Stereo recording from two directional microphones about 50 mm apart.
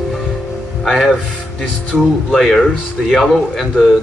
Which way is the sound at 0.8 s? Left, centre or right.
Centre.